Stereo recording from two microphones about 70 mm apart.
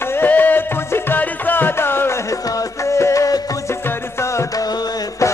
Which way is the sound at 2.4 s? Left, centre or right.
Left.